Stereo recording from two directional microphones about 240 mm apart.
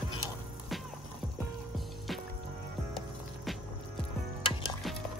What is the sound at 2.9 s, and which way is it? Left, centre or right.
Music, centre.